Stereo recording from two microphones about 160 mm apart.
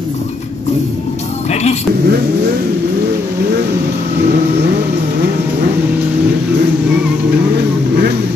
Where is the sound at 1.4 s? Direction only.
45° left (ahead or behind).